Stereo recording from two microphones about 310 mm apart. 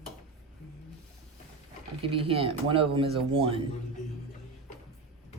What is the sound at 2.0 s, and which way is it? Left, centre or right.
Speech, centre.